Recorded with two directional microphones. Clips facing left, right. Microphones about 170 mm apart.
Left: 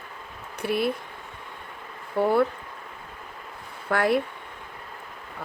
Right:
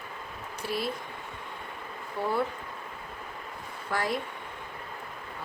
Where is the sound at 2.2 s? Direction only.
65° left (ahead or behind).